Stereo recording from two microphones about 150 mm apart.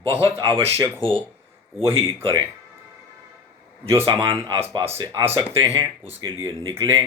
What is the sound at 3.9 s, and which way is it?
Speech, 15° right (ahead or behind).